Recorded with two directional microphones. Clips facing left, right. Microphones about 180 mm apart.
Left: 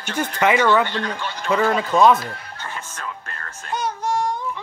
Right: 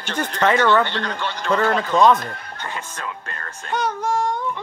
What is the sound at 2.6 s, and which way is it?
Music, 15° right (ahead or behind).